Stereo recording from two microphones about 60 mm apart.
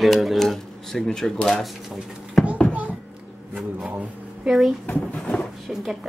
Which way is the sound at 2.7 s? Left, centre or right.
Right.